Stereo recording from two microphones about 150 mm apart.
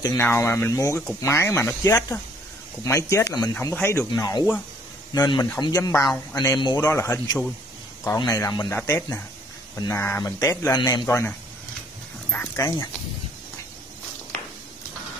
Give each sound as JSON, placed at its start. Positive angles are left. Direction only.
{"t": 0.0, "sound": "speech", "side_deg": 20}
{"t": 3.7, "sound": "speech", "side_deg": 10}